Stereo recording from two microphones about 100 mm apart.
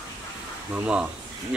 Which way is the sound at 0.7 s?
15° right (ahead or behind).